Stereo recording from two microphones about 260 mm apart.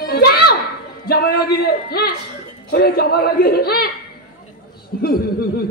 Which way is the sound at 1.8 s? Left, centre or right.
Left.